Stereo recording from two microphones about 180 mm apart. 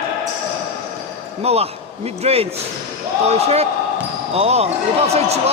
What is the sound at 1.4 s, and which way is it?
A man's voice, 35° right (ahead or behind).